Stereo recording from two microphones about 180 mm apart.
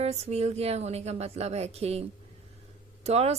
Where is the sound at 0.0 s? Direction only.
35° right (ahead or behind).